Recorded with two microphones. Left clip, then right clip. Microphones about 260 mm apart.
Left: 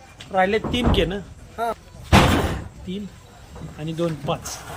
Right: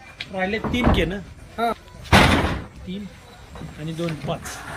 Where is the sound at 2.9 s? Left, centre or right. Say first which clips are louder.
Left 5 dB; centre.